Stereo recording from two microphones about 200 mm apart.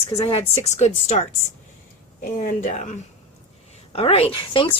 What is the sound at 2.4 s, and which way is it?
Speech, 40° left (ahead or behind).